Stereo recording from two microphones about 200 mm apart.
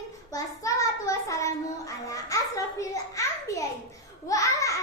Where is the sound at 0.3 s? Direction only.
15° left (ahead or behind).